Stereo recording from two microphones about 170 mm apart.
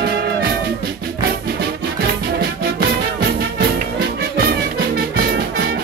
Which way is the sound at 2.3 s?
65° right (ahead or behind).